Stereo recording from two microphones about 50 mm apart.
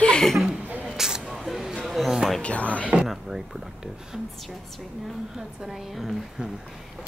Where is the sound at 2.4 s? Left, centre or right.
Left.